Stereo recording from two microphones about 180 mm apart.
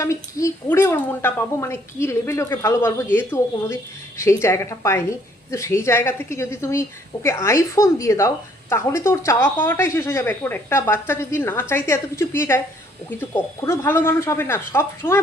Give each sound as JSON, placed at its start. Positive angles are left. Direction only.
{"t": 0.0, "sound": "a woman's voice", "side_deg": 15}